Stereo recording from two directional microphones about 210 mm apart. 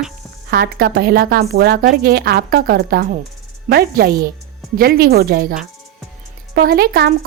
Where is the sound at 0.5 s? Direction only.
45° right (ahead or behind).